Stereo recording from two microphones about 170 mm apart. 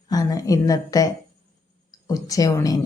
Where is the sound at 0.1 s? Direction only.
20° left (ahead or behind).